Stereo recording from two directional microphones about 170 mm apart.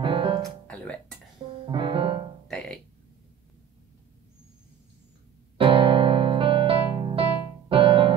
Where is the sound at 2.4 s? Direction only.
5° left (ahead or behind).